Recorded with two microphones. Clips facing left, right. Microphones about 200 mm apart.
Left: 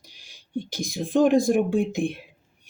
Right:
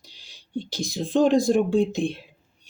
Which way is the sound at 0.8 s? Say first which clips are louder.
Even; 15° left (ahead or behind).